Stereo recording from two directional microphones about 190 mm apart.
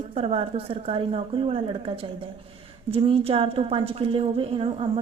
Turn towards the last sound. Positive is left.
turn(degrees=-30)  # may be behind; listen again after turning